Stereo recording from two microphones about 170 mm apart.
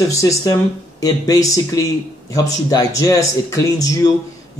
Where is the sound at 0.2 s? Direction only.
20° left (ahead or behind).